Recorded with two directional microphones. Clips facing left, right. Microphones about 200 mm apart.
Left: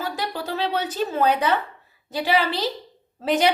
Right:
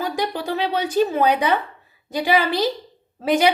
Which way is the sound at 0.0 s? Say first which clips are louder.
Right 4 dB; 15° right (ahead or behind).